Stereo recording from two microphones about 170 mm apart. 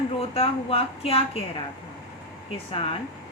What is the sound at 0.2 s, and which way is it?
A woman's voice, 35° left (ahead or behind).